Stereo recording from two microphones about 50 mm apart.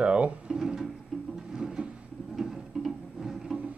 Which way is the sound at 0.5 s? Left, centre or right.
Centre.